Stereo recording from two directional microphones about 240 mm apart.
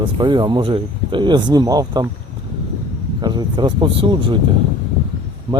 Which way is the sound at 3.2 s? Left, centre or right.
Centre.